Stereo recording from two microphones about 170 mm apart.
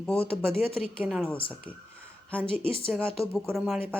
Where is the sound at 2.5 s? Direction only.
30° left (ahead or behind).